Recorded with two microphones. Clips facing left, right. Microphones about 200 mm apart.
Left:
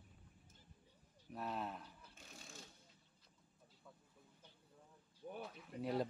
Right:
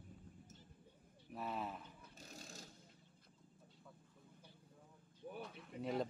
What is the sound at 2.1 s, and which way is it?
Vehicle, 40° right (ahead or behind).